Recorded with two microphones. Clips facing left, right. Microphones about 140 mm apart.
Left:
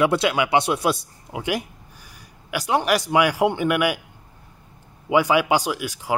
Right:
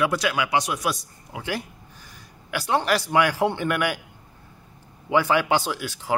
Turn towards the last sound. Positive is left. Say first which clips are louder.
# left 1 dB
turn(degrees=10)  # may be behind; listen again after turning